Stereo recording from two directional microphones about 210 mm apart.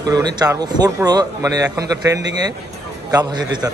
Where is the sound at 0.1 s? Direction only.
20° right (ahead or behind).